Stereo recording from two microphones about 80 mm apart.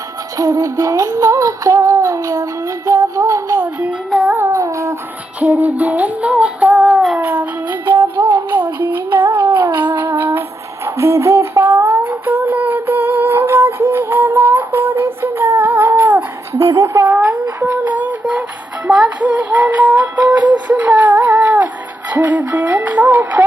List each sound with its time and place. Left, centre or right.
0.3 s music: right
3.6 s music: centre
4.4 s music: right
5.4 s music: right
7.2 s music: right
10.8 s humming: right
16.6 s a sound: right
16.9 s a sound: right
17.6 s music: centre
20.0 s music: right
21.2 s music: centre